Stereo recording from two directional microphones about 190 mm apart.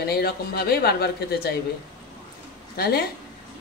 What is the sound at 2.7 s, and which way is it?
Speech, 55° left (ahead or behind).